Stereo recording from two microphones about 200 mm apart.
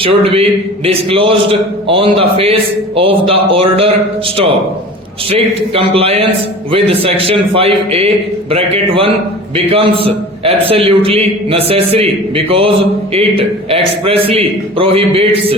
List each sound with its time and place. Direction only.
0.0 s speech: 25° right (ahead or behind)
5.3 s speech: 30° right (ahead or behind)